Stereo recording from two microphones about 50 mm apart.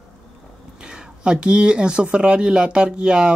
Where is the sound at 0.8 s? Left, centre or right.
Centre.